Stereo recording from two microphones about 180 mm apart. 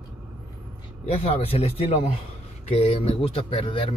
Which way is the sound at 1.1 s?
35° left (ahead or behind).